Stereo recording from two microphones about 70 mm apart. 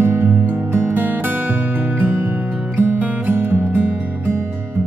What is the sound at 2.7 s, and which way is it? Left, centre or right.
Music, right.